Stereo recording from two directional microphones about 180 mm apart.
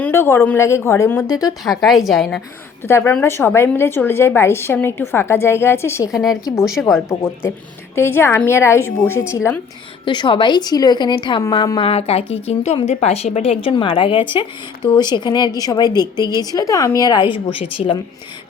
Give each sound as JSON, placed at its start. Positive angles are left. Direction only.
{"t": 0.0, "sound": "a woman's voice", "side_deg": 15}
{"t": 1.6, "sound": "a woman's voice", "side_deg": 0}
{"t": 2.8, "sound": "a woman's voice", "side_deg": 15}
{"t": 10.1, "sound": "a woman's voice", "side_deg": 25}
{"t": 11.9, "sound": "a woman's voice", "side_deg": 35}